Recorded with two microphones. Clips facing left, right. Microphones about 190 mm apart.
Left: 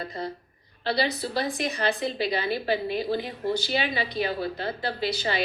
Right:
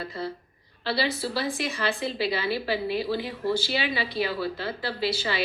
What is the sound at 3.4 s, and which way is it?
Speech, 20° left (ahead or behind).